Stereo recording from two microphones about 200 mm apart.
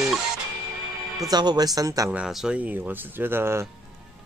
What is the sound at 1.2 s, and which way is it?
Speech, 20° right (ahead or behind).